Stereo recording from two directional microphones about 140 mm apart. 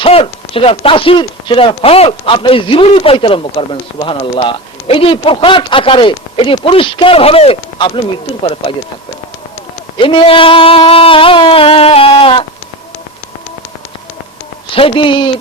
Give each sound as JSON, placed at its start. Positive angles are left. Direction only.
{"t": 0.0, "sound": "speech", "side_deg": 40}
{"t": 10.0, "sound": "speech", "side_deg": 40}
{"t": 14.8, "sound": "speech", "side_deg": 40}